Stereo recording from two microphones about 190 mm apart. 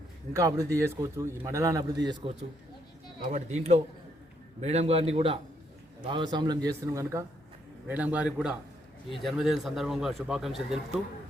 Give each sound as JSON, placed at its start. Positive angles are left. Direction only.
{"t": 0.3, "sound": "a man's voice", "side_deg": -15}
{"t": 3.3, "sound": "a man's voice", "side_deg": -35}